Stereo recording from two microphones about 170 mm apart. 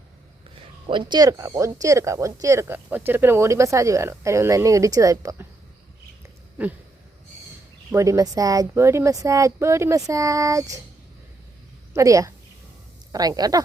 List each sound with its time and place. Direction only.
0.9 s speech: 25° right (ahead or behind)
7.9 s a woman's voice: 20° right (ahead or behind)
11.9 s a woman's voice: 20° right (ahead or behind)